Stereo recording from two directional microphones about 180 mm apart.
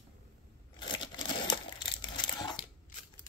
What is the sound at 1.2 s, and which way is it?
Crumpling, 25° left (ahead or behind).